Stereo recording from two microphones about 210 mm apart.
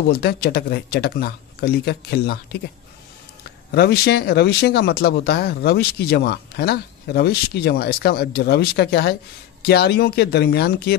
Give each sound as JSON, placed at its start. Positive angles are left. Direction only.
{"t": 0.1, "sound": "speech", "side_deg": 50}
{"t": 3.7, "sound": "speech", "side_deg": 50}